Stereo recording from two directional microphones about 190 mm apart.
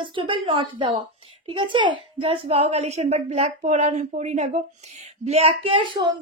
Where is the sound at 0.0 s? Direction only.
25° right (ahead or behind).